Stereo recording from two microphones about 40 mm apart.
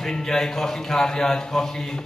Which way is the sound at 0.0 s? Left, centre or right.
Centre.